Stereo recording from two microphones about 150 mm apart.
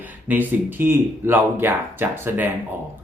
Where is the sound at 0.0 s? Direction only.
10° right (ahead or behind).